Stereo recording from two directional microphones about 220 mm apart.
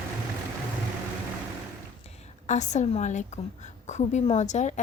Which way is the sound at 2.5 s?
30° left (ahead or behind).